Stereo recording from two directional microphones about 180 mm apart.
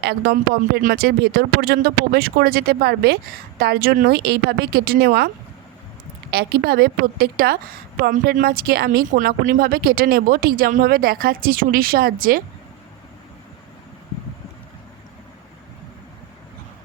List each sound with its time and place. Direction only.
0.0 s speech: 60° right (ahead or behind)
6.3 s speech: 60° right (ahead or behind)